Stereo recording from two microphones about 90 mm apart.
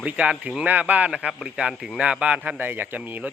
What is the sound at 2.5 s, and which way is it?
Speech, 20° right (ahead or behind).